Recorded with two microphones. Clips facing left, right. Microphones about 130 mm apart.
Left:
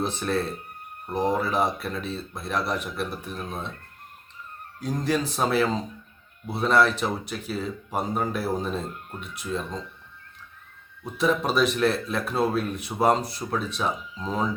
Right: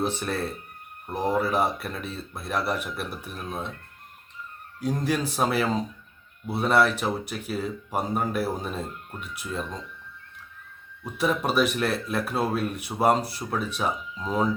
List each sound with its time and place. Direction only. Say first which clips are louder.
1.1 s speech: even; 5° right (ahead or behind)
4.8 s speech: even; 10° right (ahead or behind)
11.0 s speech: left 1 dB; 10° right (ahead or behind)